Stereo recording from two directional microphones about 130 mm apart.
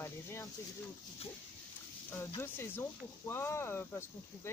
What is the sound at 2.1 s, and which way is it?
Speech, 15° left (ahead or behind).